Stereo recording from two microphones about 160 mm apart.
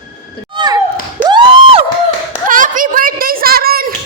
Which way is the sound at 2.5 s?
55° right (ahead or behind).